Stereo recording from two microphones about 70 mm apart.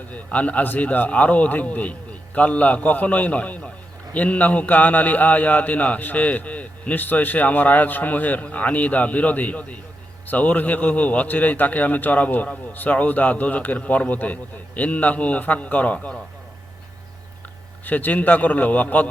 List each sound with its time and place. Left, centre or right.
0.1 s a man's voice: left
17.8 s a man's voice: left